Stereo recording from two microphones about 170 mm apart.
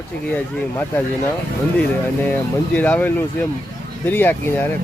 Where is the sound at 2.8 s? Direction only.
10° left (ahead or behind).